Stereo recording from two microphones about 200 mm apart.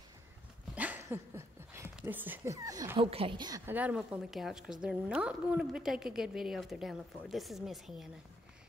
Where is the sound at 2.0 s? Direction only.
10° right (ahead or behind).